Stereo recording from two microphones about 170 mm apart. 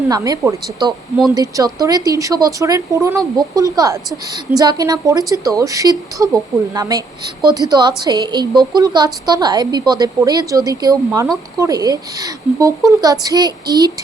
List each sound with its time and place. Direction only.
0.1 s a woman's voice: 20° right (ahead or behind)